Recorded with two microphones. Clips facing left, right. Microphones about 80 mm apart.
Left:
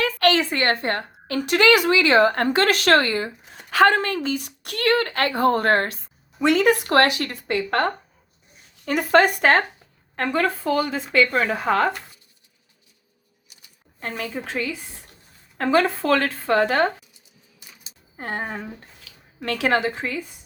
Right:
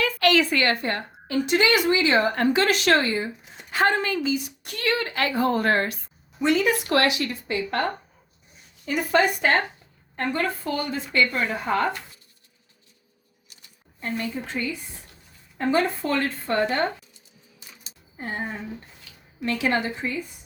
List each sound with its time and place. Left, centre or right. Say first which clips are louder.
0.0 s a sound: left 2 dB; left
0.3 s speech: even; left
3.0 s speech: left 2 dB; left
6.4 s a woman's voice: left 3 dB; left
6.7 s speech: left 4 dB; left
8.8 s a woman's voice: left 4 dB; left
10.9 s speech: left 4 dB; left
14.0 s speech: even; left
18.2 s a woman's voice: left 2 dB; left